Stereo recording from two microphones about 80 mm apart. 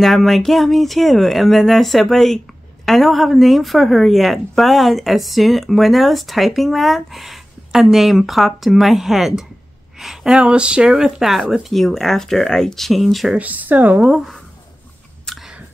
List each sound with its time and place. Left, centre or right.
0.0 s speech: centre
13.3 s speech: centre
14.0 s speech: centre
15.3 s chewing: centre